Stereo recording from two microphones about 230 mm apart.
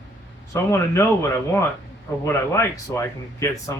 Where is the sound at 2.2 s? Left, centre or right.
Centre.